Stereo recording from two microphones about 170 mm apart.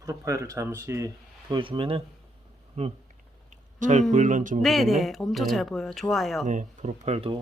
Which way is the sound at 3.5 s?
45° right (ahead or behind).